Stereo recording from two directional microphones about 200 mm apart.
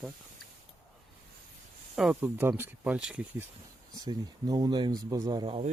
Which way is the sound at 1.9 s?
5° right (ahead or behind).